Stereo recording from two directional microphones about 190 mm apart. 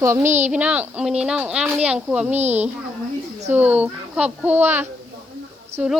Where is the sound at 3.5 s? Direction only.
10° right (ahead or behind).